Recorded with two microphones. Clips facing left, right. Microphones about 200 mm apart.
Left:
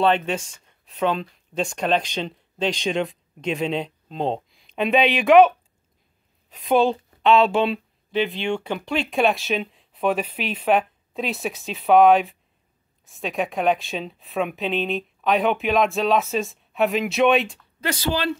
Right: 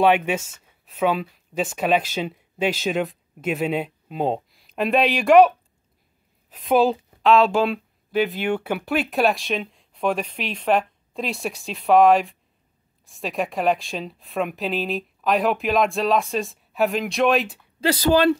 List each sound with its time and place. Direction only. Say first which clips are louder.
0.0 s speech: right 2 dB; 10° right (ahead or behind)
6.5 s speech: right 1 dB; centre (ahead or behind)
17.7 s speech: right 7 dB; 35° right (ahead or behind)